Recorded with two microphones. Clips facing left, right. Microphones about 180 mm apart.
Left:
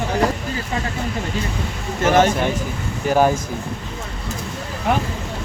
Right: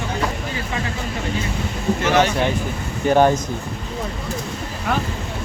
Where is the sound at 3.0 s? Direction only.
5° left (ahead or behind).